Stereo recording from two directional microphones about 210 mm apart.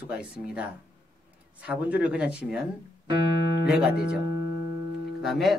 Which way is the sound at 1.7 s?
5° right (ahead or behind).